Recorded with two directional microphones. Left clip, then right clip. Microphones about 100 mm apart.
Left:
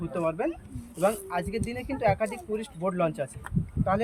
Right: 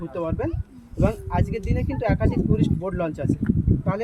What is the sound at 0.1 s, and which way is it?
Speech, 30° right (ahead or behind).